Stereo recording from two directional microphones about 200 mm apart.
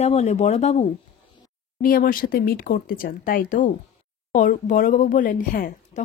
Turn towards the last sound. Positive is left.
turn(degrees=40)  # may be behind; listen again after turning